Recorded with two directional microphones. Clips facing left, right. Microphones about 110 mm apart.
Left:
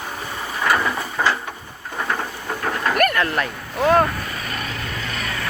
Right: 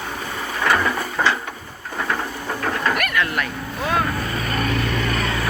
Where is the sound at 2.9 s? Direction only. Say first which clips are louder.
Left 4 dB; 40° left (ahead or behind).